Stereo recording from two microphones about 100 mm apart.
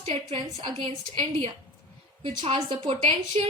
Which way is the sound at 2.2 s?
65° right (ahead or behind).